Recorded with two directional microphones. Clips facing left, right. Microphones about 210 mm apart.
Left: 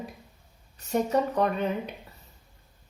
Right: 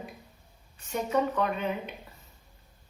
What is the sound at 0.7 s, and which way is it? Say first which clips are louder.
Speech: left 3 dB; 40° left (ahead or behind).